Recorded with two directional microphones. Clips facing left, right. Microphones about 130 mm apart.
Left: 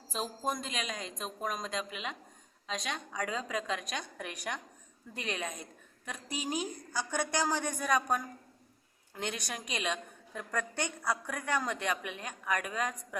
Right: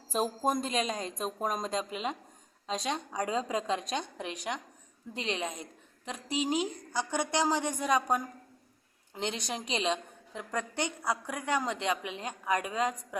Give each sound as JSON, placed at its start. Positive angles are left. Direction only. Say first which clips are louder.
{"t": 0.1, "sound": "a woman's voice", "louder": "right 6 dB", "side_deg": -45}